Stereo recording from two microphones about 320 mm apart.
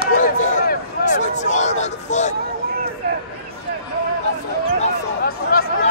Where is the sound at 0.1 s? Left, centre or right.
Left.